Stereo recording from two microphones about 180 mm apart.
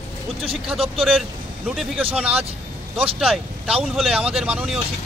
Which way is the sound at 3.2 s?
5° right (ahead or behind).